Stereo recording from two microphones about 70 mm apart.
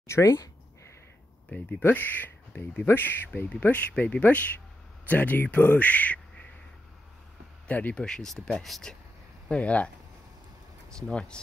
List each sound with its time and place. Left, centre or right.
0.0 s speech: left
1.8 s speech: left
7.6 s speech: left
7.9 s speech: centre
9.5 s speech: centre
11.1 s speech: centre